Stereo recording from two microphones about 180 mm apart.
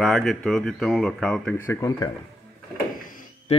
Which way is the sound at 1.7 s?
20° left (ahead or behind).